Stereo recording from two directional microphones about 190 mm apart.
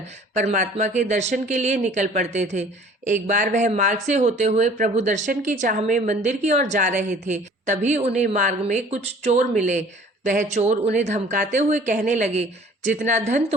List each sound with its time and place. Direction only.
0.3 s speech: 40° right (ahead or behind)